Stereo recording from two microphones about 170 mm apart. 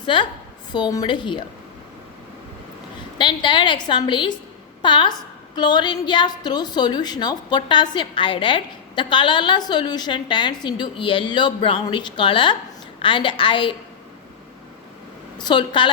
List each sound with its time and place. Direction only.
0.0 s a woman's voice: 30° left (ahead or behind)
3.2 s a woman's voice: 30° left (ahead or behind)
15.4 s a woman's voice: 25° left (ahead or behind)